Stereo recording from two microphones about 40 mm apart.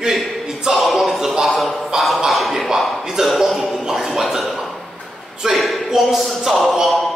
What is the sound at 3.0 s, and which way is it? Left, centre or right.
Speech, centre.